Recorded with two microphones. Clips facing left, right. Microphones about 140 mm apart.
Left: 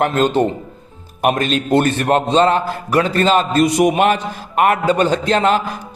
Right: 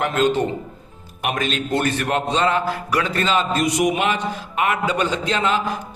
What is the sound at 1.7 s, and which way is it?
A man's voice, 35° left (ahead or behind).